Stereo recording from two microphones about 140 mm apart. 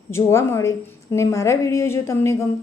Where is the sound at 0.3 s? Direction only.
20° left (ahead or behind).